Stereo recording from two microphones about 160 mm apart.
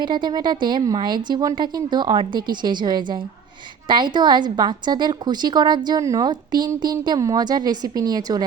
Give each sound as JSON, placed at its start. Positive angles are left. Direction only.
{"t": 0.0, "sound": "a woman's voice", "side_deg": -30}